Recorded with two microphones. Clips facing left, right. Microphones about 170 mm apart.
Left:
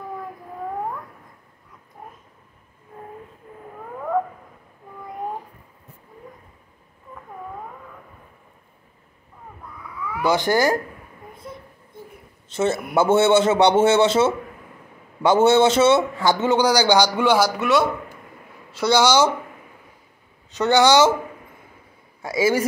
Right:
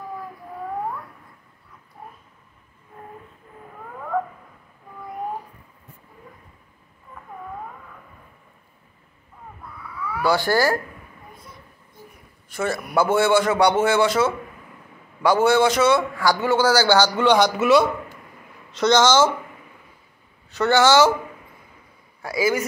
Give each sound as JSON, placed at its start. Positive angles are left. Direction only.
{"t": 10.0, "sound": "speech", "side_deg": 20}
{"t": 11.3, "sound": "child singing", "side_deg": 25}
{"t": 12.4, "sound": "a man's voice", "side_deg": 25}
{"t": 17.6, "sound": "speech", "side_deg": 0}
{"t": 20.5, "sound": "speech", "side_deg": 15}
{"t": 22.2, "sound": "a man's voice", "side_deg": 25}